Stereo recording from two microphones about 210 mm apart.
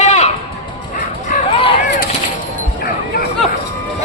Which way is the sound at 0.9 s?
40° left (ahead or behind).